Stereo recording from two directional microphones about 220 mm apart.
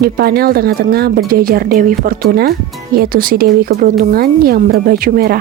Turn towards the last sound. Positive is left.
turn(degrees=-45)  # may be behind; listen again after turning